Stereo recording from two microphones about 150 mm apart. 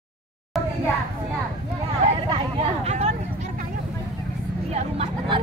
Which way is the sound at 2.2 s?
40° right (ahead or behind).